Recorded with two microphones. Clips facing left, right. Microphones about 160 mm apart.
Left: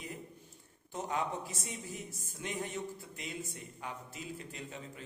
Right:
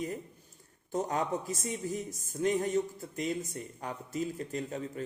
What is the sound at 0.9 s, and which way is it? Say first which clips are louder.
A man's voice: right 5 dB; 45° right (ahead or behind).